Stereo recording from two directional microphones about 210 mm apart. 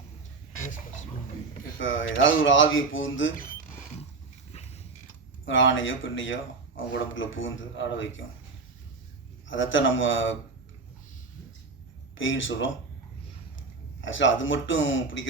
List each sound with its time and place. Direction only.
1.8 s a man's voice: 65° left (ahead or behind)
4.5 s a sound: 30° left (ahead or behind)
5.5 s a man's voice: 65° left (ahead or behind)
9.5 s a man's voice: 65° left (ahead or behind)
12.1 s a man's voice: 65° left (ahead or behind)
14.0 s a man's voice: 65° left (ahead or behind)